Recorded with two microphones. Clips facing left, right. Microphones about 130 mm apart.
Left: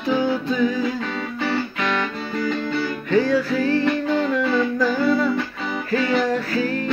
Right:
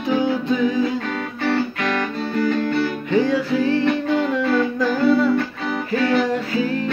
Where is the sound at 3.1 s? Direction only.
20° right (ahead or behind).